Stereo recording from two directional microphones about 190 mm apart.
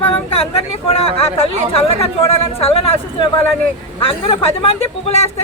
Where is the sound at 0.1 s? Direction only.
30° left (ahead or behind).